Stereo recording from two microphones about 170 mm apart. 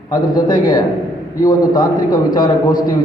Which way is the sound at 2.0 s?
55° left (ahead or behind).